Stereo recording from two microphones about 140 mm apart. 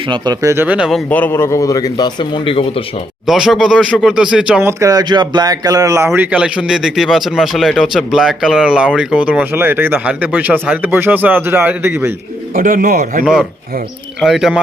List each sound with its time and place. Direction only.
0.1 s speech: 30° right (ahead or behind)
0.5 s speech: 10° right (ahead or behind)
1.1 s speech: 15° left (ahead or behind); by 2.8 s 40° left (ahead or behind)
3.2 s speech: centre (ahead or behind)
4.6 s speech: 25° right (ahead or behind)
6.1 s speech: 10° right (ahead or behind)
12.5 s speech: 80° right
14.2 s speech: 5° right (ahead or behind)